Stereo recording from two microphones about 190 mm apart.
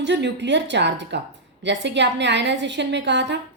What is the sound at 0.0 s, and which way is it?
A woman's voice, 65° right (ahead or behind).